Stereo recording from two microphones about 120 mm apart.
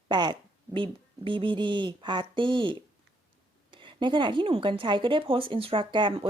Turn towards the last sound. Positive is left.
turn(degrees=-45)  # may be behind; listen again after turning